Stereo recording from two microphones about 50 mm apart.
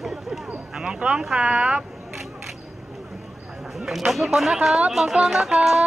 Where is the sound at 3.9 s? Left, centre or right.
Centre.